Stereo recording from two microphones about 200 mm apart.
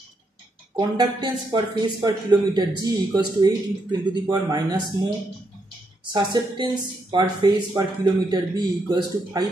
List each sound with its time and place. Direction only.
0.7 s speech: 20° right (ahead or behind)
6.1 s speech: 20° right (ahead or behind)